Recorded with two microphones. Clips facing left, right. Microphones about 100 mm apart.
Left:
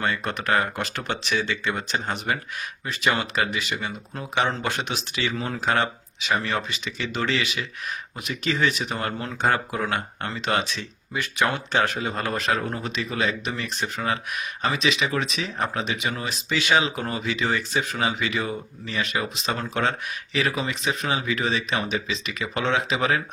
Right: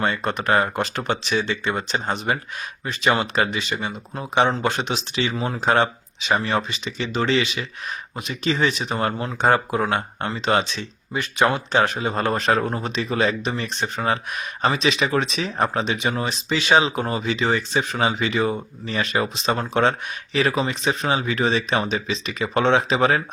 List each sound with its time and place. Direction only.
0.0 s speech: 30° right (ahead or behind)
12.0 s speech: 30° right (ahead or behind)